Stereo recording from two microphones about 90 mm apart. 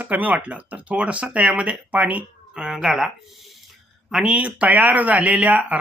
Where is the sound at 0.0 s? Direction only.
20° right (ahead or behind).